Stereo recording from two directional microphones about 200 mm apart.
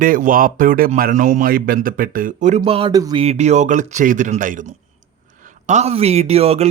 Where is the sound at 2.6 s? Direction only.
25° right (ahead or behind).